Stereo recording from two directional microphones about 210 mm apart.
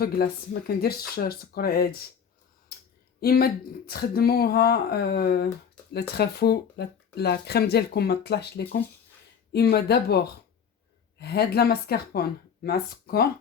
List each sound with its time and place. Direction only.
0.2 s speech: 45° left (ahead or behind)
3.2 s speech: 45° left (ahead or behind)